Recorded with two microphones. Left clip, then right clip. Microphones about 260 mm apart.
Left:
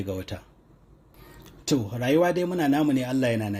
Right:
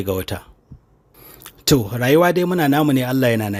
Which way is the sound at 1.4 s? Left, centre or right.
Right.